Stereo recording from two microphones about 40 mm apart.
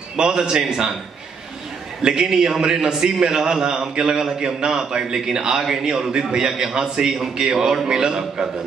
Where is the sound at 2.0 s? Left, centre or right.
Centre.